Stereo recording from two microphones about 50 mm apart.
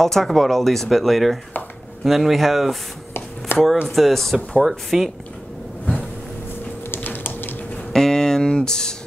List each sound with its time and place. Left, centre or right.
0.0 s speech: centre
3.5 s speech: left
3.9 s speech: centre
4.6 s speech: centre
6.9 s typing: left
7.9 s a sound: centre